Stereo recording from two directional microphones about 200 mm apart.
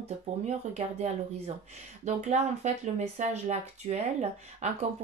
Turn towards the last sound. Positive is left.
turn(degrees=-35)  # may be behind; listen again after turning